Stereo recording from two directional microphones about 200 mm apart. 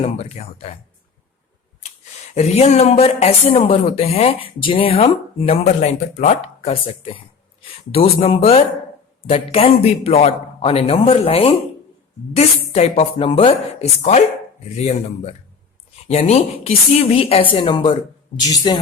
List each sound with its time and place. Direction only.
0.0 s speech: 30° left (ahead or behind)
2.3 s a man's voice: 35° left (ahead or behind)